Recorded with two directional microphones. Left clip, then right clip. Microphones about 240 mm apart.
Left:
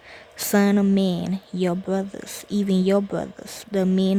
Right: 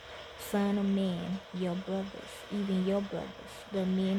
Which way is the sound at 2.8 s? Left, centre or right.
Left.